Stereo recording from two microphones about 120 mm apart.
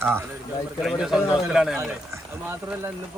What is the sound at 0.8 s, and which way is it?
A man's voice, centre (ahead or behind).